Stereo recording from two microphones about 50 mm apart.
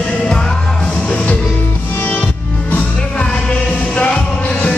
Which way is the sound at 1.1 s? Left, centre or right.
Left.